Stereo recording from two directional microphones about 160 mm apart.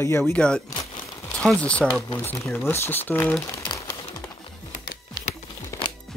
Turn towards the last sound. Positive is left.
turn(degrees=20)  # may be behind; listen again after turning